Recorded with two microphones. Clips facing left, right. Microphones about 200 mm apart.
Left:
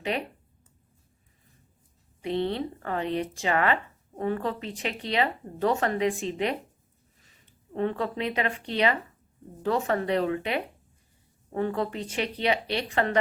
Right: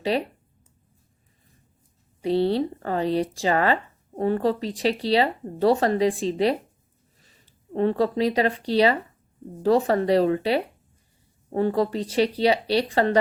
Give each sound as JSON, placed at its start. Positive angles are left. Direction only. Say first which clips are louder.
{"t": 0.0, "sound": "speech", "louder": "right 6 dB", "side_deg": -35}
{"t": 2.2, "sound": "speech", "louder": "right 6 dB", "side_deg": -35}